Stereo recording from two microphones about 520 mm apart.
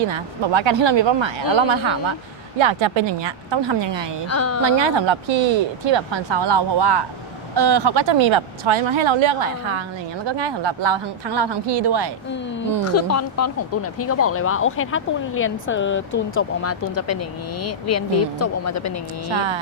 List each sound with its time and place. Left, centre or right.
0.1 s a woman's voice: right
4.3 s speech: left
4.6 s a woman's voice: right
12.8 s speech: left
19.3 s speech: right